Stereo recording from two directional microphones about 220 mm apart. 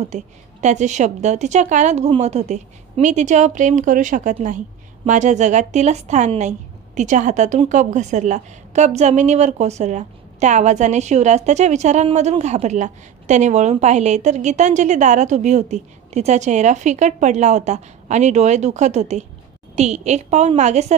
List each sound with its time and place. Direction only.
0.0 s a woman's voice: 30° right (ahead or behind)